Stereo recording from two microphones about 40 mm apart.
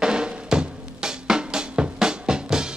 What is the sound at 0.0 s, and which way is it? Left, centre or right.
Drum, centre.